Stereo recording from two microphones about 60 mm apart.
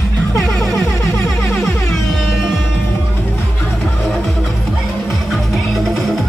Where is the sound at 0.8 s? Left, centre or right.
Left.